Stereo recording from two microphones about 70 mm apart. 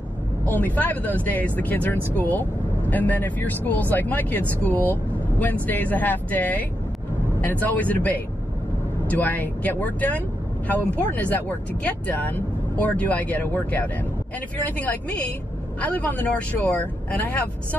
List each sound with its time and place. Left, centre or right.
0.5 s speech: left
7.6 s speech: left